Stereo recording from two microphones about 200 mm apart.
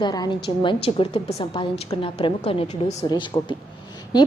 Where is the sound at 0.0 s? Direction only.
20° left (ahead or behind).